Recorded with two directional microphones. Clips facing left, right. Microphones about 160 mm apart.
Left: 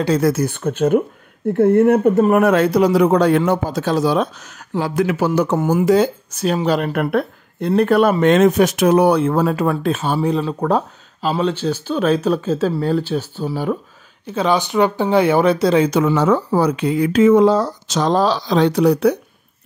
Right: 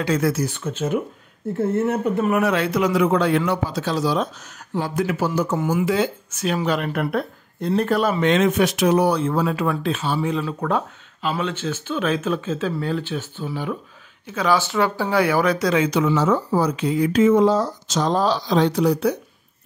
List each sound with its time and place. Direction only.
0.0 s speech: 35° left (ahead or behind)
0.3 s a man's voice: 50° left (ahead or behind)
2.1 s a man's voice: 45° left (ahead or behind); by 5.6 s 70° left (ahead or behind)
5.6 s speech: 45° left (ahead or behind)
6.9 s speech: 60° left (ahead or behind); by 13.7 s 40° left (ahead or behind)
14.2 s speech: 25° left (ahead or behind)
16.0 s speech: 55° left (ahead or behind)